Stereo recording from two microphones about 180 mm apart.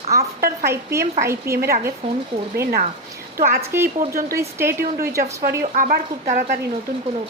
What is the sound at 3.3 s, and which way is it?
Speech, 50° right (ahead or behind).